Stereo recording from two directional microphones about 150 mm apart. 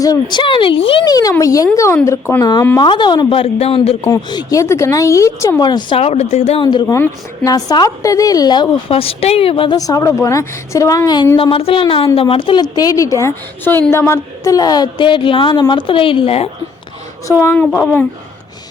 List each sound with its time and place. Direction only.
0.0 s speech: 25° left (ahead or behind)
1.0 s a woman's voice: 25° left (ahead or behind)
2.7 s speech: 30° left (ahead or behind)
4.1 s speech: 25° left (ahead or behind)
6.0 s speech: 45° left (ahead or behind)
6.6 s speech: 30° left (ahead or behind)
6.8 s speech: 20° left (ahead or behind)
8.9 s speech: 40° left (ahead or behind)
9.7 s speech: 25° left (ahead or behind)
11.3 s speech: 35° left (ahead or behind)
17.4 s a woman's voice: 10° left (ahead or behind)